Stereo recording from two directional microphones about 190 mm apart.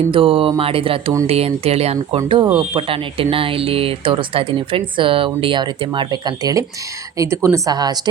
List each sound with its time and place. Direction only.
0.1 s speech: 30° right (ahead or behind)